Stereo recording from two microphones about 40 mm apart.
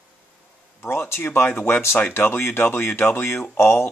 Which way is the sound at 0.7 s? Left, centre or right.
Left.